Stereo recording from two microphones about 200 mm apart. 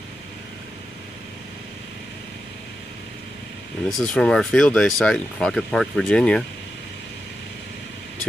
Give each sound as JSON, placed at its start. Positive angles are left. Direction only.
{"t": 3.9, "sound": "speech", "side_deg": 0}